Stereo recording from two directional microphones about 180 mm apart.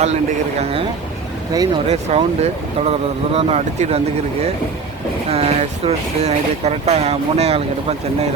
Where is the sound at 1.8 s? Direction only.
35° right (ahead or behind).